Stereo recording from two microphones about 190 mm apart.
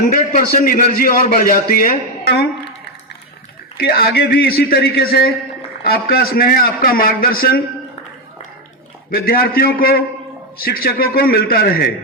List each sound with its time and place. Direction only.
0.0 s a man's voice: 45° left (ahead or behind)
3.8 s a man's voice: 55° left (ahead or behind)
9.0 s a man's voice: 50° left (ahead or behind)